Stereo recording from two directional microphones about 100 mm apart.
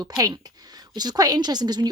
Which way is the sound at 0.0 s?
40° right (ahead or behind).